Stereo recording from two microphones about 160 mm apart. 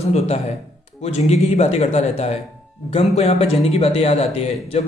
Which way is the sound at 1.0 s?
40° left (ahead or behind).